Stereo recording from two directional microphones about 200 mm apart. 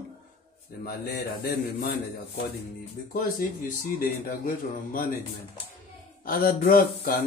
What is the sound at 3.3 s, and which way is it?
Speech, 45° left (ahead or behind).